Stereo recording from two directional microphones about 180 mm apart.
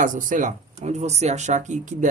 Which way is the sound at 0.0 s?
45° right (ahead or behind).